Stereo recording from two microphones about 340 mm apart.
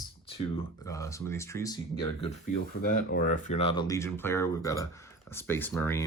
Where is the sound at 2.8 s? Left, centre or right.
Left.